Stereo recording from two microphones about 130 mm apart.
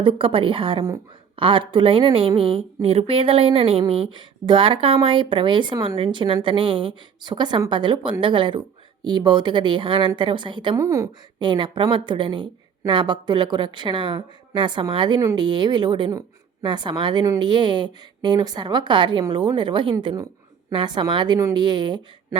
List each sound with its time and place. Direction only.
0.0 s a woman's voice: 40° right (ahead or behind)
10.8 s a woman's voice: 25° right (ahead or behind)
11.3 s speech: 35° right (ahead or behind)